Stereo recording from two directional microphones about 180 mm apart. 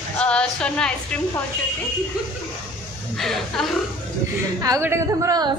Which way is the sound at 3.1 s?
Centre (ahead or behind).